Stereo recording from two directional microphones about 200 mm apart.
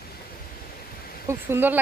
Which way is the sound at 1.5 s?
10° right (ahead or behind).